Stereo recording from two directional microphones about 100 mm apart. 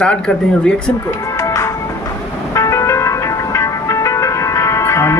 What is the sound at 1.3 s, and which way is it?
Music, 30° left (ahead or behind).